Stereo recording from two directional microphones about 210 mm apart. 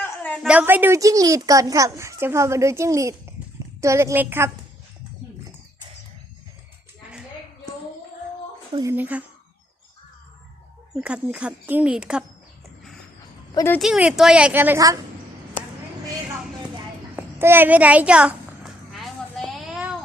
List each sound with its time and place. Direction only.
0.0 s a sound: 5° left (ahead or behind)
0.4 s a woman's voice: 5° right (ahead or behind)
8.7 s a woman's voice: 15° right (ahead or behind)
11.0 s a woman's voice: 5° right (ahead or behind)
13.5 s speech: 15° left (ahead or behind)
13.7 s a woman's voice: centre (ahead or behind)
17.2 s livestock: 10° right (ahead or behind)